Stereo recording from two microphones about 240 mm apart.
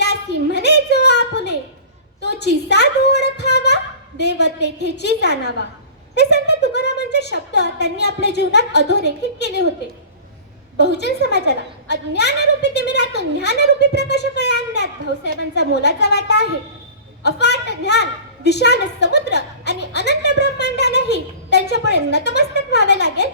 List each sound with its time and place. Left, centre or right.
0.0 s a sound: left
4.2 s a woman's voice: left
10.8 s a woman's voice: left